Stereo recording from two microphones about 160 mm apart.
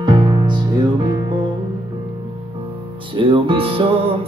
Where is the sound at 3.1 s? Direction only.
35° right (ahead or behind).